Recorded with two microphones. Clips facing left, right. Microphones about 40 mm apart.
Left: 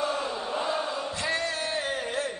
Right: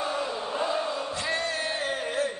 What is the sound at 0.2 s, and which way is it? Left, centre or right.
Chant, centre.